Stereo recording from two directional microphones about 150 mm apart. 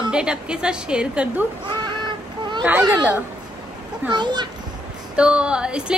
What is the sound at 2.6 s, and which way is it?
Speech, 10° right (ahead or behind).